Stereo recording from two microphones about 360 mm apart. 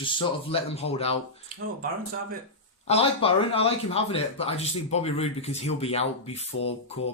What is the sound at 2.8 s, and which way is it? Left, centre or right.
Speech, centre.